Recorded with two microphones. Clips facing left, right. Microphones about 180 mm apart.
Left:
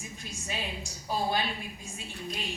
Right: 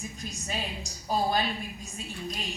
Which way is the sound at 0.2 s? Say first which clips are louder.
Right 1 dB; 40° right (ahead or behind).